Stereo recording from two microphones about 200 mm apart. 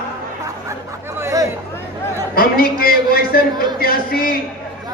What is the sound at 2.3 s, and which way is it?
A man's voice, 45° left (ahead or behind).